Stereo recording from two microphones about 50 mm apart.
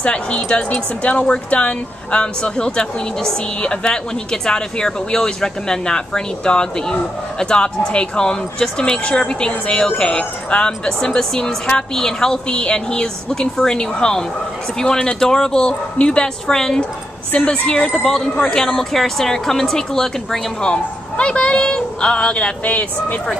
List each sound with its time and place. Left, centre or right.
0.0 s a woman's voice: left
17.8 s speech: centre
20.7 s speech: centre
22.7 s speech: left